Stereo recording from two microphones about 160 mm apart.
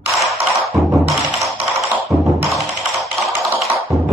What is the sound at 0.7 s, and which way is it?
Music, centre (ahead or behind).